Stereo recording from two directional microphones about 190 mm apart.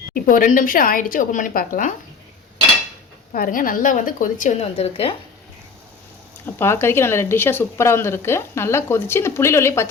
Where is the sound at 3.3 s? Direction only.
45° left (ahead or behind); by 5.1 s 30° left (ahead or behind).